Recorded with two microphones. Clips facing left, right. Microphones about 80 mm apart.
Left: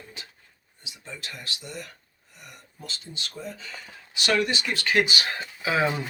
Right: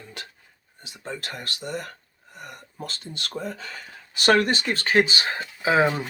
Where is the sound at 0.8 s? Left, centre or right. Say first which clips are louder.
Right 7 dB; right.